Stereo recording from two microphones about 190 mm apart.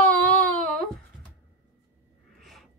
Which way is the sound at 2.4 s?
Centre (ahead or behind).